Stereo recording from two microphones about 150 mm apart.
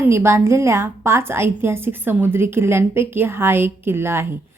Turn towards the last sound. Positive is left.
turn(degrees=-15)  # may be behind; listen again after turning